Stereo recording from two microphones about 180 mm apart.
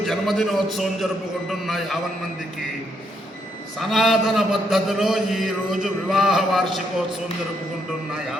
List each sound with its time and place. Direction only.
0.0 s a man's voice: centre (ahead or behind)
3.8 s a man's voice: centre (ahead or behind)